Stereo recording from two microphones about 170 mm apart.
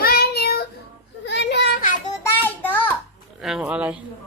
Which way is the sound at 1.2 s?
90° left.